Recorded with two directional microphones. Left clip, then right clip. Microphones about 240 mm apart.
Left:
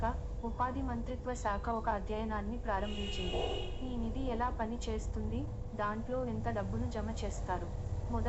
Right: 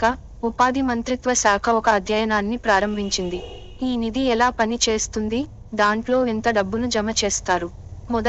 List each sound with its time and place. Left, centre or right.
0.0 s a woman's voice: right